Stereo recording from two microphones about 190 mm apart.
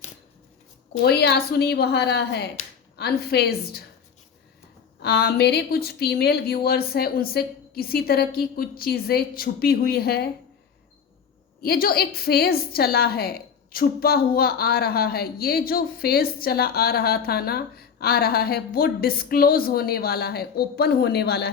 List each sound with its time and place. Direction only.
1.0 s a woman's voice: 60° left (ahead or behind)
5.0 s a woman's voice: 60° left (ahead or behind)
11.6 s a woman's voice: 55° left (ahead or behind)